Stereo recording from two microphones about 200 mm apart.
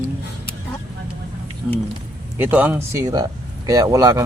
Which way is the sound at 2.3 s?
10° right (ahead or behind).